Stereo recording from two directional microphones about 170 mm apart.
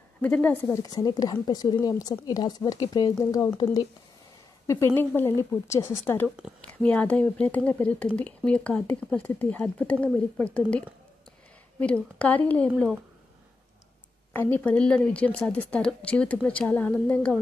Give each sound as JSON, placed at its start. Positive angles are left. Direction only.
{"t": 0.2, "sound": "speech", "side_deg": 10}
{"t": 0.8, "sound": "a woman's voice", "side_deg": 25}
{"t": 4.9, "sound": "speech", "side_deg": 10}
{"t": 6.2, "sound": "a woman's voice", "side_deg": -5}
{"t": 6.6, "sound": "speech", "side_deg": 5}
{"t": 11.8, "sound": "speech", "side_deg": 5}
{"t": 14.3, "sound": "speech", "side_deg": 10}